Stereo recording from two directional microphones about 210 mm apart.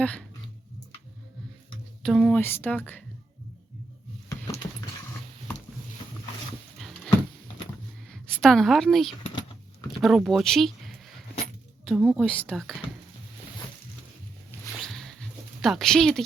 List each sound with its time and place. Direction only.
0.0 s speech: 5° left (ahead or behind)
2.0 s speech: centre (ahead or behind)
4.6 s mechanisms: 15° left (ahead or behind)
6.7 s dog: centre (ahead or behind)
8.0 s a woman's voice: 5° left (ahead or behind)
14.8 s a sound: centre (ahead or behind)